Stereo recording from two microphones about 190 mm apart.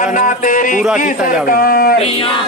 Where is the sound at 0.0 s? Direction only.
45° left (ahead or behind).